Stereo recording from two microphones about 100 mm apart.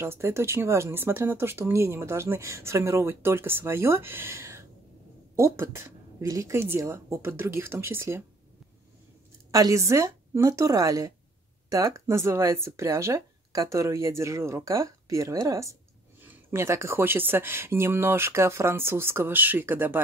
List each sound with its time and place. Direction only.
0.0 s speech: 25° right (ahead or behind)
9.5 s speech: 35° right (ahead or behind)
16.3 s speech: 20° right (ahead or behind)